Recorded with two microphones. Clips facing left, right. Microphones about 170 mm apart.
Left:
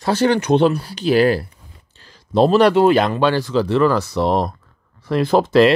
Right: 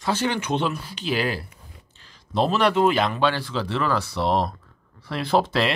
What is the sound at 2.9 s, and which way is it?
Speech, 45° left (ahead or behind).